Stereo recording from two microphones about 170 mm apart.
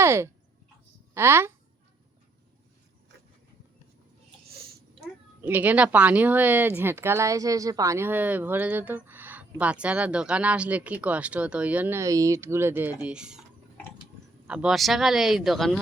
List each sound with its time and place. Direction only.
0.0 s speech: 15° right (ahead or behind)
5.4 s speech: 10° right (ahead or behind)
14.4 s speech: 5° right (ahead or behind)